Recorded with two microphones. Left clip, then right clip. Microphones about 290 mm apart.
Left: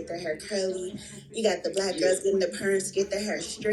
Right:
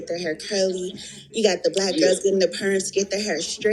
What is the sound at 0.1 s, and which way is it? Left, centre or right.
A woman's voice, right.